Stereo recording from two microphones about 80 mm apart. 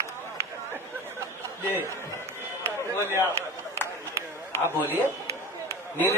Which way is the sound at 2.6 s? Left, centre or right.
Right.